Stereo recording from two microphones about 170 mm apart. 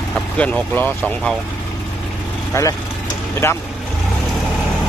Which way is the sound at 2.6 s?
15° left (ahead or behind).